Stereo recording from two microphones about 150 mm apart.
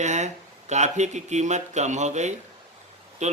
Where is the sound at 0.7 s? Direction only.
50° right (ahead or behind).